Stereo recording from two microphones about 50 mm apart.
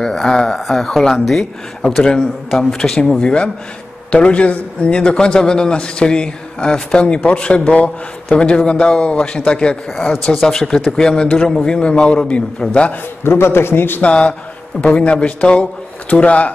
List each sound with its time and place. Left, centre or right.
0.0 s a man's voice: centre
13.2 s a man's voice: left
14.0 s a man's voice: left